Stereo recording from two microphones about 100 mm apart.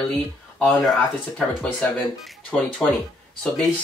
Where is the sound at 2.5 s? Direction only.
10° left (ahead or behind).